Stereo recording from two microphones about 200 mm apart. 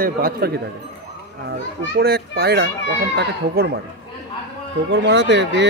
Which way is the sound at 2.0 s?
50° right (ahead or behind).